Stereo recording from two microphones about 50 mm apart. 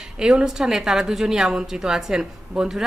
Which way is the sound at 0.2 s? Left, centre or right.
Centre.